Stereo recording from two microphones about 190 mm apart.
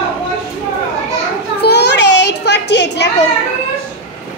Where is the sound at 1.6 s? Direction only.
60° left (ahead or behind).